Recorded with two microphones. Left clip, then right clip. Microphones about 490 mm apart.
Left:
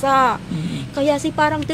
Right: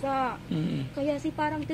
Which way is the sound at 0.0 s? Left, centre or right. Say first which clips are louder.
Left 13 dB; left.